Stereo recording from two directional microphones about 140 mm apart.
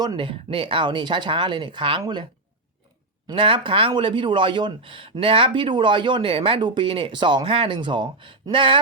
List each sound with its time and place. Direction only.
0.0 s speech: 35° right (ahead or behind)
3.2 s speech: 40° right (ahead or behind)